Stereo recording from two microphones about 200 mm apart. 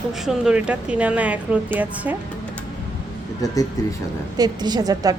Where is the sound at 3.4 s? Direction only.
15° left (ahead or behind).